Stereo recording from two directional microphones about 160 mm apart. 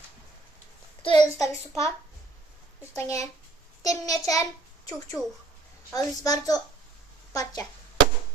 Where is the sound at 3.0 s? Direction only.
20° left (ahead or behind).